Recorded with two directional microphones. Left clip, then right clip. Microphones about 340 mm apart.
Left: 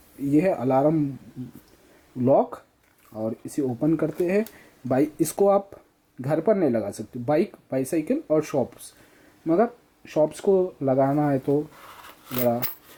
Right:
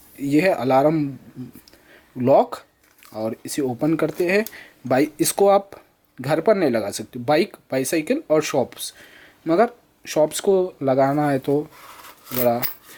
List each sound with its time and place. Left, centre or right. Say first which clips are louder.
0.3 s speech: right 4 dB; centre
2.2 s speech: right 4 dB; centre
3.1 s speech: right 3 dB; centre
3.4 s speech: right 2 dB; centre